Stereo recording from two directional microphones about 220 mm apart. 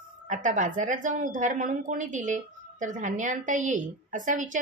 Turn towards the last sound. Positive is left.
turn(degrees=-35)  # may be behind; listen again after turning